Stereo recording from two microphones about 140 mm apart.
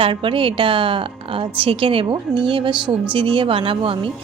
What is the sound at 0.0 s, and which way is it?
Speech, 40° right (ahead or behind).